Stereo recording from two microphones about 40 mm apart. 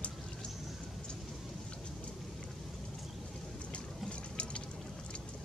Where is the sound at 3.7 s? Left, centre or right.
Left.